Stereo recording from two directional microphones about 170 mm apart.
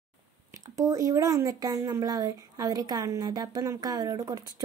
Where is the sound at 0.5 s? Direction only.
20° right (ahead or behind).